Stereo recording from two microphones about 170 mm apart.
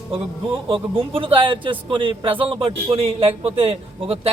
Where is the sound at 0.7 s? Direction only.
30° right (ahead or behind).